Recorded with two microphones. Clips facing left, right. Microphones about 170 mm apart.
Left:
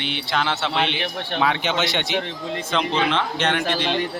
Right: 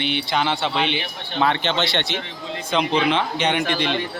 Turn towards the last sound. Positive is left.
turn(degrees=0)  # may be behind; listen again after turning